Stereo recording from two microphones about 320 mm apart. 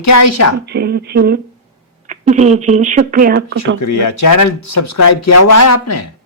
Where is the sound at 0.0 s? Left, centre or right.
Left.